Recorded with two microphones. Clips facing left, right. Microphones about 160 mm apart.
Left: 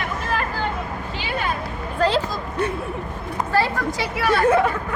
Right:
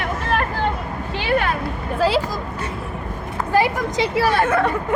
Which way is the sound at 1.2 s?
70° right (ahead or behind).